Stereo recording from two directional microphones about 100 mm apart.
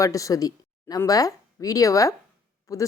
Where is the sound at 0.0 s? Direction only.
35° left (ahead or behind).